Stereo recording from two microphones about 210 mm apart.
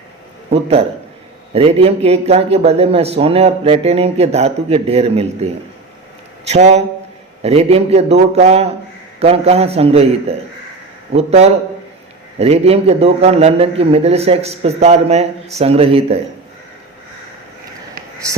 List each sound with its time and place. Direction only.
0.5 s speech: 30° right (ahead or behind)